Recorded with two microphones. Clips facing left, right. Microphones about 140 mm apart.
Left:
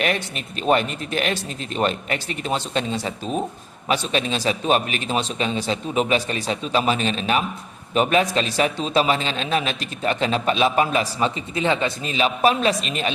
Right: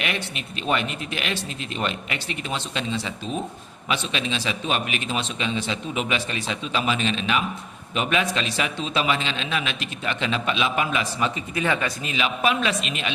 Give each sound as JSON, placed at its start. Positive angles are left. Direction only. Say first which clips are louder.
{"t": 0.0, "sound": "a man's voice", "louder": "left 5 dB", "side_deg": 40}